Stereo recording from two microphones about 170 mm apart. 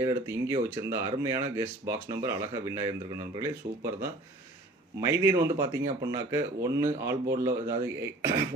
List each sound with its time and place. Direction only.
0.0 s speech: 15° right (ahead or behind)
4.9 s speech: 15° right (ahead or behind)